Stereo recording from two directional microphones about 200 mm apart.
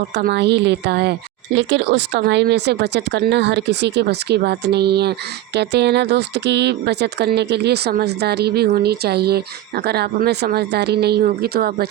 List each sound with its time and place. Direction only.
0.1 s speech: 55° right (ahead or behind)